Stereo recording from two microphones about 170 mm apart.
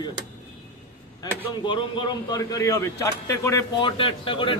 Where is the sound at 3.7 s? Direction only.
30° left (ahead or behind).